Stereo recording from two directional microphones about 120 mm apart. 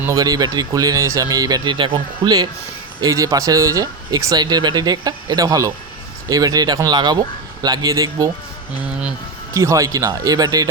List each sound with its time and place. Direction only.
0.0 s speech: 30° right (ahead or behind)
3.0 s speech: 30° right (ahead or behind)
9.6 s speech: 25° right (ahead or behind)